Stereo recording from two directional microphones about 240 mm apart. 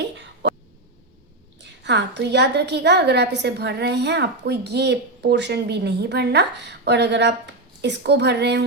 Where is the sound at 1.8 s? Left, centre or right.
Right.